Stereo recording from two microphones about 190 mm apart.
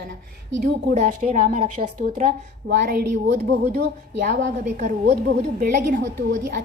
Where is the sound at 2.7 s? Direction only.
55° right (ahead or behind).